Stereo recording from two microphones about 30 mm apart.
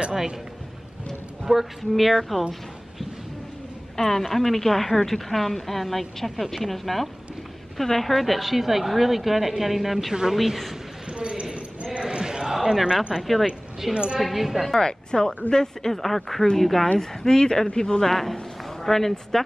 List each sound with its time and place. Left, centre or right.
1.4 s speech: centre
3.9 s a woman's voice: centre
4.2 s a woman's voice: centre
8.1 s a woman's voice: centre
11.1 s a sound: right
12.0 s chant: right
13.1 s speech: centre
13.9 s a woman's voice: right
14.2 s speech: centre
14.7 s speech: left
15.9 s a woman's voice: centre
17.0 s speech: centre
18.0 s speech: centre